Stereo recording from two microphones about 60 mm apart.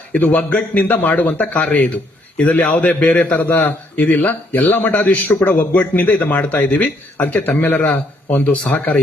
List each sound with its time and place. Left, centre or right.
0.1 s a man's voice: left